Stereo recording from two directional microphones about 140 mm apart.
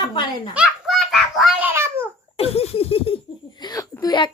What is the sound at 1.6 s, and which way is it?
Babbling, 15° right (ahead or behind).